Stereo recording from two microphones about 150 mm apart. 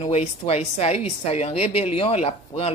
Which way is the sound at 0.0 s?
45° left (ahead or behind).